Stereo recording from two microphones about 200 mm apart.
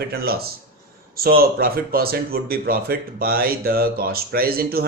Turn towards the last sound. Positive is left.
turn(degrees=-50)  # may be behind; listen again after turning